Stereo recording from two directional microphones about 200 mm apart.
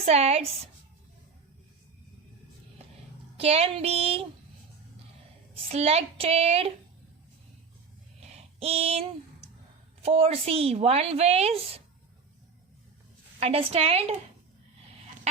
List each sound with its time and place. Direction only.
0.0 s a woman's voice: 30° right (ahead or behind)
3.3 s a woman's voice: 30° right (ahead or behind)
5.5 s a woman's voice: 30° right (ahead or behind)
8.2 s a sound: 30° right (ahead or behind)
10.0 s a woman's voice: 30° right (ahead or behind)
13.4 s a woman's voice: 30° right (ahead or behind)